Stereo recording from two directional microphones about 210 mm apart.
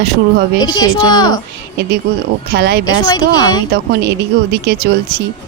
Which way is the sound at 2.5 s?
50° right (ahead or behind).